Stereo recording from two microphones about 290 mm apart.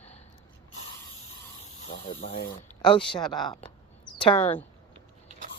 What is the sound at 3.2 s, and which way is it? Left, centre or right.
Speech, centre.